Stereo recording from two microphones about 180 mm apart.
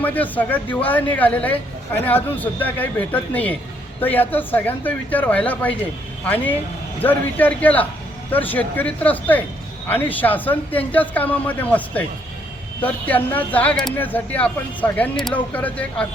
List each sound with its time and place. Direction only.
0.0 s speech: 10° left (ahead or behind)